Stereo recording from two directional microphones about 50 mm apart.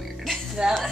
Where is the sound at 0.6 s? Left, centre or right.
Centre.